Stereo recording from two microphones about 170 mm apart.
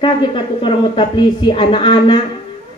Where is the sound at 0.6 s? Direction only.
30° left (ahead or behind).